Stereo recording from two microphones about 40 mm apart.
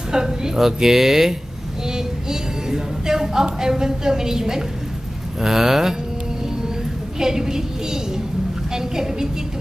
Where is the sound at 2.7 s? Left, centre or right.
Centre.